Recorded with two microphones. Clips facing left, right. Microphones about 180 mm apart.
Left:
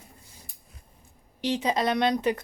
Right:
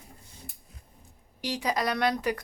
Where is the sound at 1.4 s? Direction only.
25° left (ahead or behind).